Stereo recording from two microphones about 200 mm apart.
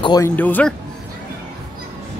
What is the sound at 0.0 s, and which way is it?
Speech, 20° left (ahead or behind).